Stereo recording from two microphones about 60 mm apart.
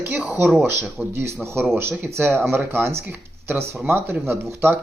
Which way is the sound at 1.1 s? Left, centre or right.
Right.